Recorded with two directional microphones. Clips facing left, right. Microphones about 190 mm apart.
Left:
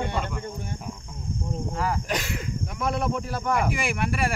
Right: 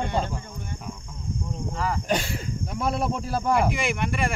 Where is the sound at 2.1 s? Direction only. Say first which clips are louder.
Right 3 dB; 30° right (ahead or behind).